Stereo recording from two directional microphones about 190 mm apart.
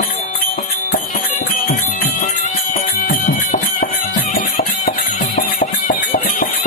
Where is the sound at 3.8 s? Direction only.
50° left (ahead or behind).